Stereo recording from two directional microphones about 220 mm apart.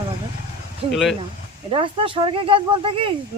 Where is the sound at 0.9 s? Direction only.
Centre (ahead or behind).